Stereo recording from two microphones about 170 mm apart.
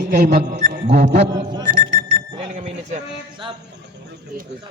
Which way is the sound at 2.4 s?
40° right (ahead or behind).